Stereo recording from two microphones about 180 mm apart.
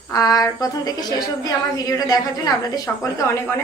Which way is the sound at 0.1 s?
20° left (ahead or behind).